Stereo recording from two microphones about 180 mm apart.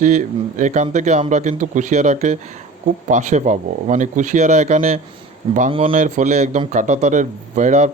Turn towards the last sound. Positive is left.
turn(degrees=-40)  # may be behind; listen again after turning